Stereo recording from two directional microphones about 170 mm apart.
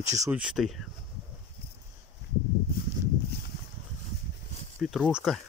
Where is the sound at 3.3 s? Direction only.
70° left (ahead or behind).